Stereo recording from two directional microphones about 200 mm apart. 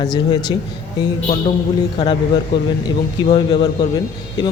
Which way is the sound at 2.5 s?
55° left (ahead or behind).